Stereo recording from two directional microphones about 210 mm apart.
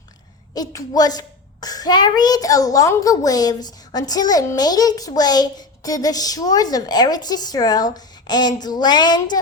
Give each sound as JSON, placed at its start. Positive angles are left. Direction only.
{"t": 0.5, "sound": "a child's voice", "side_deg": 15}